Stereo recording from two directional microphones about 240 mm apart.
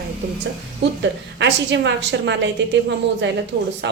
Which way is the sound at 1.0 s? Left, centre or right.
Right.